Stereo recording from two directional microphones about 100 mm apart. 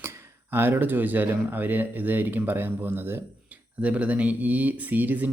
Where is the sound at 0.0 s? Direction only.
25° right (ahead or behind).